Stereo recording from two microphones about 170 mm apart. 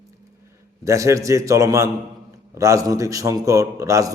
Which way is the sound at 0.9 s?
20° right (ahead or behind).